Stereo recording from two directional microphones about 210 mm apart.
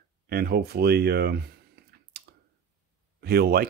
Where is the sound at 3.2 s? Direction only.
50° right (ahead or behind).